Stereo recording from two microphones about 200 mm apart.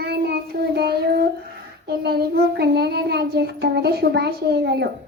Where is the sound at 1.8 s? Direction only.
55° right (ahead or behind).